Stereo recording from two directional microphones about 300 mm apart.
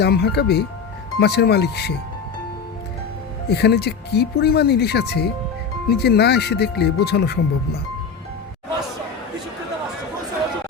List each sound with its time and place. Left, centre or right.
0.0 s speech: left
3.5 s speech: left